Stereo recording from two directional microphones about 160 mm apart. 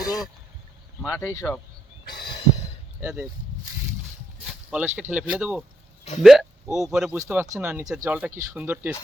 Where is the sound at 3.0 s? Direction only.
10° right (ahead or behind).